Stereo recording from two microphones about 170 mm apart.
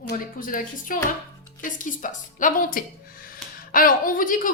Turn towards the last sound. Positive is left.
turn(degrees=50)  # may be behind; listen again after turning